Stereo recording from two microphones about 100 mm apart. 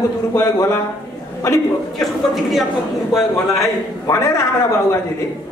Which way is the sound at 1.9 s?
Centre (ahead or behind).